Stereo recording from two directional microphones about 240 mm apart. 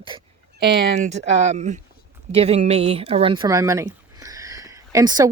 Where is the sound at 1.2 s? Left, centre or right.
Right.